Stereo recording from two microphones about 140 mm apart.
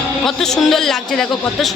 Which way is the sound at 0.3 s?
Centre (ahead or behind).